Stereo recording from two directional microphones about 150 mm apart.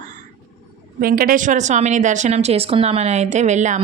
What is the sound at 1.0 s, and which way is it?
A woman's voice, 75° right (ahead or behind).